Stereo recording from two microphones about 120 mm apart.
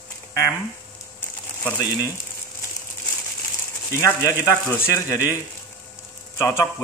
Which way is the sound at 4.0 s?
30° left (ahead or behind).